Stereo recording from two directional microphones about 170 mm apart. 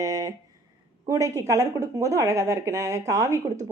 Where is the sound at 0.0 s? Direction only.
20° right (ahead or behind).